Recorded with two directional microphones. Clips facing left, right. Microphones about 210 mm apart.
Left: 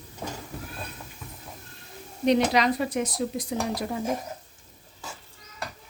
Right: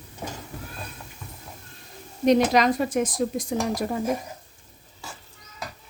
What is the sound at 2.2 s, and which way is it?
Speech, 45° right (ahead or behind).